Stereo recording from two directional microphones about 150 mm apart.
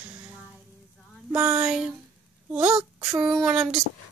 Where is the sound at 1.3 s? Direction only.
10° right (ahead or behind).